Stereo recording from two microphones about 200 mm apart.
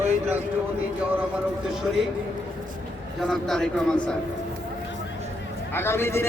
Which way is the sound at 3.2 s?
Centre (ahead or behind).